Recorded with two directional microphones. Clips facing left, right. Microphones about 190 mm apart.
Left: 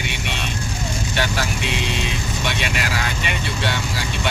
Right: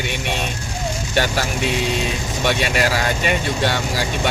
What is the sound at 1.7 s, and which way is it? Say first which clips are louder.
Speech: right 4 dB; 45° right (ahead or behind).